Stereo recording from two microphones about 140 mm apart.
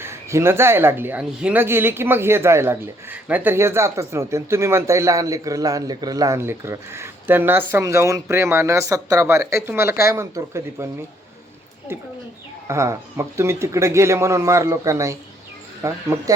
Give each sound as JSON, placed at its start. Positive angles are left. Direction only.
{"t": 0.0, "sound": "speech", "side_deg": -20}
{"t": 11.9, "sound": "speech", "side_deg": -15}